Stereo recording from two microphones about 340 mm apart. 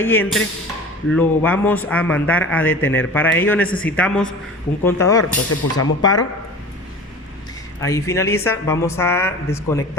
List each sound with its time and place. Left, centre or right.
0.0 s speech: centre
5.5 s speech: left
6.0 s speech: centre
7.8 s speech: centre